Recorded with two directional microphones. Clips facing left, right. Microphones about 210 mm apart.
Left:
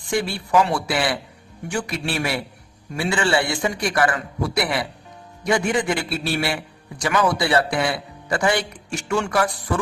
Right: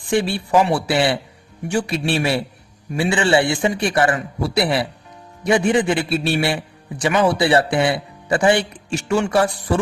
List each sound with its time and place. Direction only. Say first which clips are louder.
0.1 s a man's voice: right 3 dB; 25° right (ahead or behind)